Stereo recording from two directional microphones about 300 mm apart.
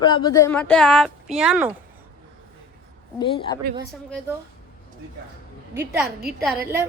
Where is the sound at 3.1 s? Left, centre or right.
Centre.